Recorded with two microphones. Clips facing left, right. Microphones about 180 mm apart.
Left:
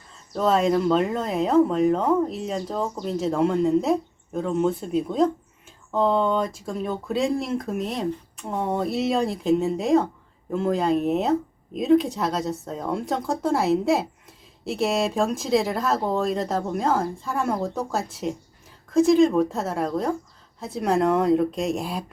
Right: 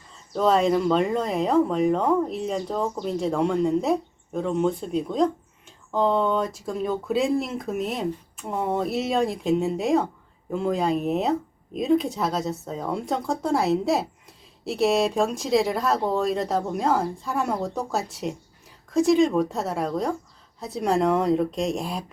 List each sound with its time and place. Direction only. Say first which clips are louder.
0.3 s speech: even; centre (ahead or behind)